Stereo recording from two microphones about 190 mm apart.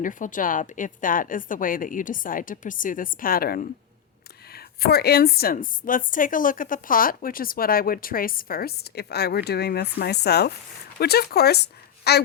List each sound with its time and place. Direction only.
0.0 s a woman's voice: 45° left (ahead or behind); by 12.2 s 60° left (ahead or behind)